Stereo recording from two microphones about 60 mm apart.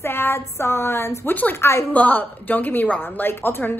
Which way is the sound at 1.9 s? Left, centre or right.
Left.